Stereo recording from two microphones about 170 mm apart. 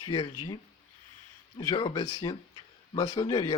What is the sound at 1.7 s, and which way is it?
Speech, 30° left (ahead or behind).